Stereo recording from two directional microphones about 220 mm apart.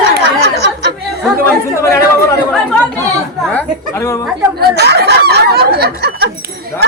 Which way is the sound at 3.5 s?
10° left (ahead or behind).